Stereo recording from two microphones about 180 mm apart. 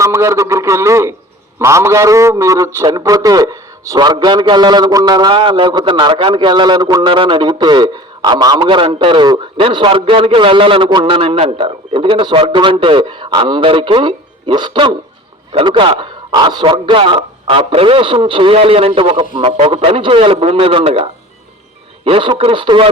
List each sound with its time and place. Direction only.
0.0 s a man's voice: 15° right (ahead or behind)